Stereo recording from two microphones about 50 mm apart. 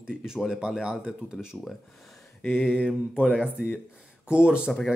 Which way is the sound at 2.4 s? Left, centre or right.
Left.